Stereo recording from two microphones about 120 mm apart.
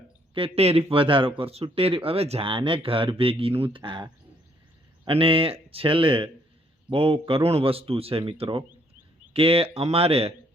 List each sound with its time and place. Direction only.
0.3 s speech: 55° right (ahead or behind)